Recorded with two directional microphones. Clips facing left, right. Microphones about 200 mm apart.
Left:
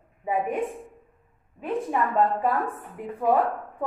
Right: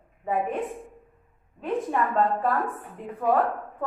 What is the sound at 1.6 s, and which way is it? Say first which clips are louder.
A woman's voice: even; 10° left (ahead or behind).